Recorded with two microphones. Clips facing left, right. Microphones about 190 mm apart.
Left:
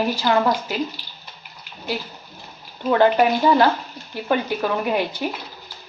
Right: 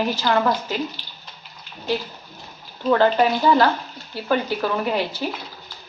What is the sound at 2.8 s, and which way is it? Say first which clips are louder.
Speech: left 1 dB; 15° left (ahead or behind).